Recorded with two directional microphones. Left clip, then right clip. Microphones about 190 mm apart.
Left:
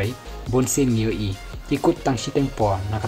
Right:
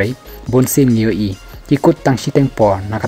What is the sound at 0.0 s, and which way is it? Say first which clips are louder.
Speech: right 9 dB; 45° right (ahead or behind).